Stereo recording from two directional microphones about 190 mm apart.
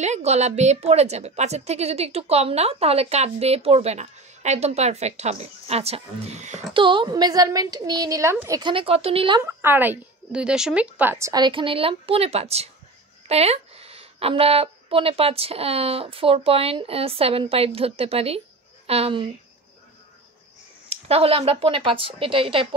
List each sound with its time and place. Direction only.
0.0 s a woman's voice: 35° right (ahead or behind)
6.8 s a woman's voice: 25° right (ahead or behind)
9.5 s a woman's voice: 10° right (ahead or behind); by 19.3 s 30° right (ahead or behind)
20.9 s a woman's voice: 30° right (ahead or behind)